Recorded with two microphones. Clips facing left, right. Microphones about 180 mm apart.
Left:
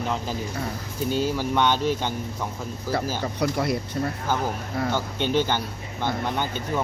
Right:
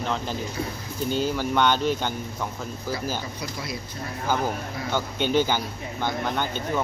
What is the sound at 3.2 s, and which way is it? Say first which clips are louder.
Speech: left 9 dB; 65° left (ahead or behind).